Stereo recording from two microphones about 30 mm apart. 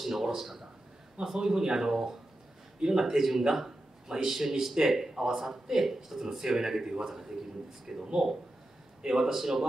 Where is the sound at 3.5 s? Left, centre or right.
Centre.